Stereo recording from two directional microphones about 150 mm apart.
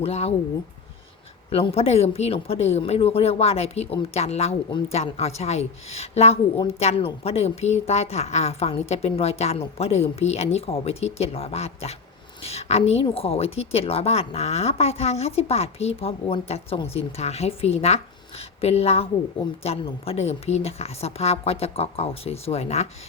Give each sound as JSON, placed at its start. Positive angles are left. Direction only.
{"t": 0.0, "sound": "a woman's voice", "side_deg": 45}
{"t": 1.5, "sound": "a woman's voice", "side_deg": 40}